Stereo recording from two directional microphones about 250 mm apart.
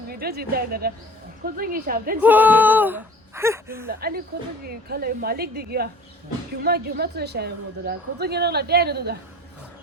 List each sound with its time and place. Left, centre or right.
0.1 s a woman's voice: right
2.2 s speech: centre
3.8 s a woman's voice: right